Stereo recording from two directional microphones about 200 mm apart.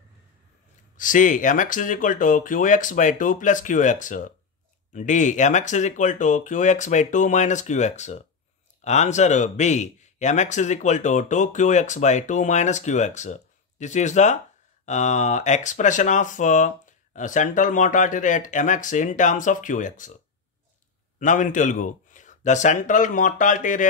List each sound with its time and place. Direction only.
0.9 s speech: 40° left (ahead or behind)
21.2 s speech: 40° left (ahead or behind)